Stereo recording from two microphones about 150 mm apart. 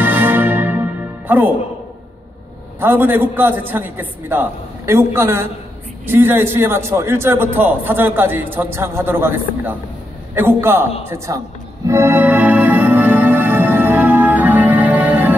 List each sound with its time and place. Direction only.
0.0 s music: 15° right (ahead or behind)
2.8 s a man's voice: 15° right (ahead or behind)
11.9 s music: 15° right (ahead or behind)